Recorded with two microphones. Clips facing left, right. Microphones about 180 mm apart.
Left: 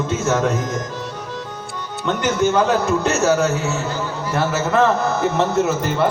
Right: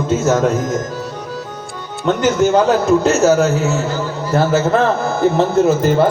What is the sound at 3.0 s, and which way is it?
Speech, 35° right (ahead or behind).